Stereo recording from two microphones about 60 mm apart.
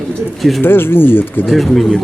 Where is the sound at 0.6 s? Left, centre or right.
Left.